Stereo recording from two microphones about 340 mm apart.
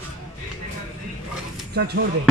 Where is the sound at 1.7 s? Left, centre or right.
Right.